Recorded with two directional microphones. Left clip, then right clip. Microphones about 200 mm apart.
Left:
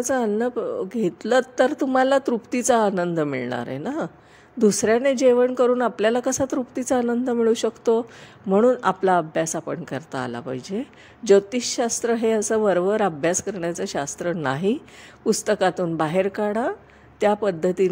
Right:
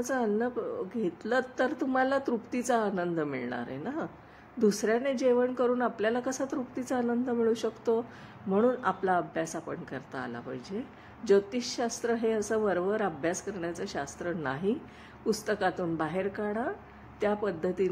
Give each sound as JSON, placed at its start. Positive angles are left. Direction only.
{"t": 0.0, "sound": "a woman's voice", "side_deg": 40}